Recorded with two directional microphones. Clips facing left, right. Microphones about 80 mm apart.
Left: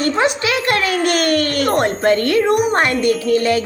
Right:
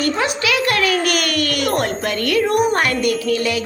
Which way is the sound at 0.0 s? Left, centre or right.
Left.